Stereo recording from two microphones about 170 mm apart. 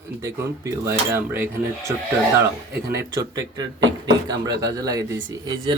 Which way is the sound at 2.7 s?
70° right (ahead or behind).